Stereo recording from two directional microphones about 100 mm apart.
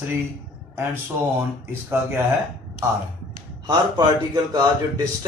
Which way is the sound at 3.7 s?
40° right (ahead or behind).